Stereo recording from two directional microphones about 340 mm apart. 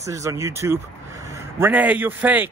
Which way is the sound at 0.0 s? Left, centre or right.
Centre.